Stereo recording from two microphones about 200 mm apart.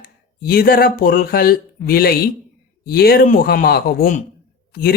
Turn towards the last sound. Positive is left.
turn(degrees=50)  # may be behind; listen again after turning